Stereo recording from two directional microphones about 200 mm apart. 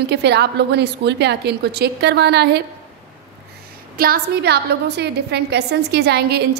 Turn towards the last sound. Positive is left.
turn(degrees=-55)  # may be behind; listen again after turning